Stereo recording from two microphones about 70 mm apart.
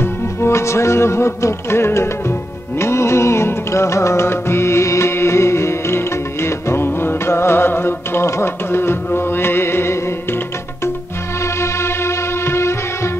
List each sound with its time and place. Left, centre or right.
0.0 s music: left
11.6 s music: left